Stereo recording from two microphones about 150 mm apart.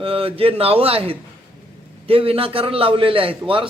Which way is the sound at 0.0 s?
40° right (ahead or behind).